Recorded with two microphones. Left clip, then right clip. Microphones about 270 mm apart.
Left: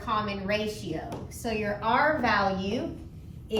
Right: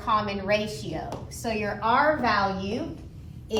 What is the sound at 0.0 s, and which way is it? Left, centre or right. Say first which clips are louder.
A woman's voice: right 4 dB; centre.